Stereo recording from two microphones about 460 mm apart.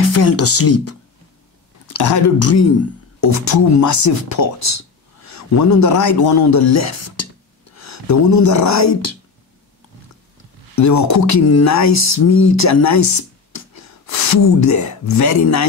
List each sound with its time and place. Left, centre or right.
0.1 s speech: left
10.8 s speech: left